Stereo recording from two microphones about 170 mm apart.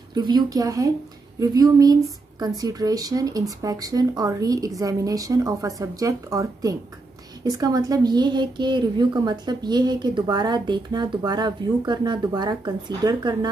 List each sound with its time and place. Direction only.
0.1 s a woman's voice: 25° right (ahead or behind)